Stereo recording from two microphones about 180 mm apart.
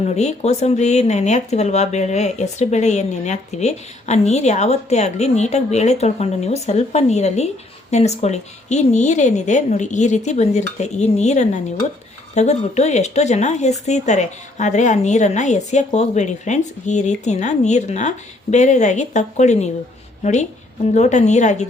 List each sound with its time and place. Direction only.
0.0 s speech: 40° left (ahead or behind)